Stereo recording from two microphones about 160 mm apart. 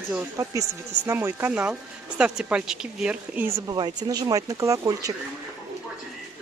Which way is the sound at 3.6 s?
25° right (ahead or behind).